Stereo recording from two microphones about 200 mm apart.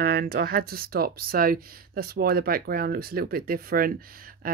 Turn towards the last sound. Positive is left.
turn(degrees=-45)  # may be behind; listen again after turning